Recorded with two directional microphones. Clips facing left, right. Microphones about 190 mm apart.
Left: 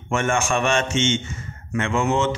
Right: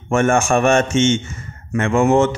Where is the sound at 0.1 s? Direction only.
45° right (ahead or behind).